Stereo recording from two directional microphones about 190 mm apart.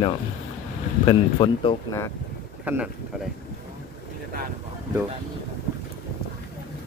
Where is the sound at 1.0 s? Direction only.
25° left (ahead or behind).